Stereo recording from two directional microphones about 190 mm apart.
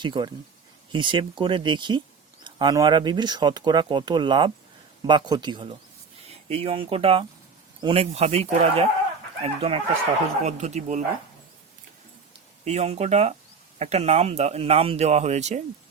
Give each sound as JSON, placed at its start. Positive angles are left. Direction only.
{"t": 0.0, "sound": "speech", "side_deg": -25}
{"t": 12.6, "sound": "speech", "side_deg": -35}